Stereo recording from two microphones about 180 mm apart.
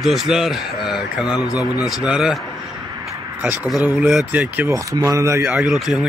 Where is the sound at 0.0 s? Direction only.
Centre (ahead or behind).